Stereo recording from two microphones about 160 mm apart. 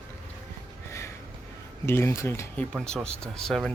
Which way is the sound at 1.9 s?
15° left (ahead or behind).